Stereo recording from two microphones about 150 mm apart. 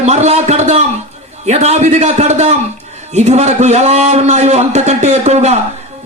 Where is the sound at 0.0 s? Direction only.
50° right (ahead or behind).